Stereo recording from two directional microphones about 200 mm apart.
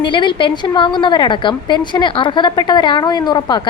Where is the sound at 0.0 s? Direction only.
25° left (ahead or behind).